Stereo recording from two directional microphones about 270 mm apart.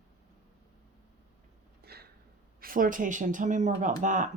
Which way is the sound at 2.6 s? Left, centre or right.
Right.